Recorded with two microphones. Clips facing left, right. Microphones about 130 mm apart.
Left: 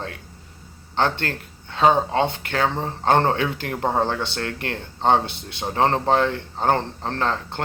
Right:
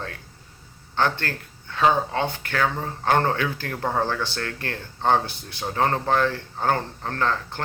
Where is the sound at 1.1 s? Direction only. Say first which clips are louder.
Left 3 dB; 20° left (ahead or behind).